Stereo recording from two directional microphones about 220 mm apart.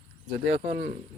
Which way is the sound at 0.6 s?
35° right (ahead or behind).